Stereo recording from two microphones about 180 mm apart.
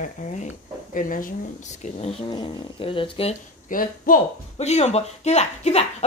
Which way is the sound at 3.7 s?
50° left (ahead or behind).